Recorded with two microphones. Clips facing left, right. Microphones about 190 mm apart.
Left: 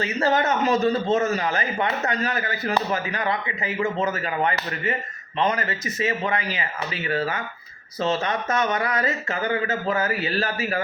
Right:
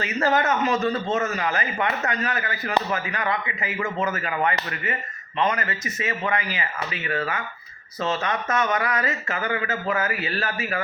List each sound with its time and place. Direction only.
0.0 s speech: 30° left (ahead or behind)